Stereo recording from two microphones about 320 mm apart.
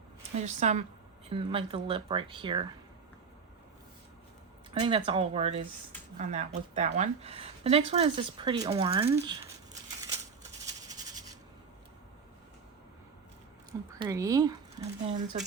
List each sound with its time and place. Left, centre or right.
0.3 s speech: right
4.7 s speech: centre
13.7 s speech: centre
14.8 s speech: right